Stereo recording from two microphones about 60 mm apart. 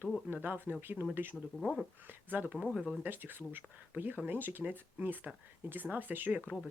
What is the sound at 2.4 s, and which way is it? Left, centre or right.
Speech, centre.